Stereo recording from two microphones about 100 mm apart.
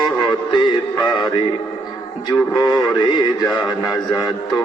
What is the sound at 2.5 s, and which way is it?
Speech, 40° left (ahead or behind).